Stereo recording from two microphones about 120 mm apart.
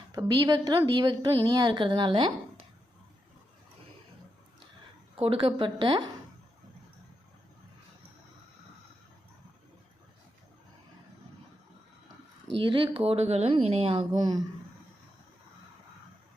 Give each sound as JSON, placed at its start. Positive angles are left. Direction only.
{"t": 0.1, "sound": "a woman's voice", "side_deg": -30}
{"t": 5.1, "sound": "speech", "side_deg": -50}
{"t": 12.5, "sound": "speech", "side_deg": -45}
{"t": 14.1, "sound": "a woman's voice", "side_deg": -35}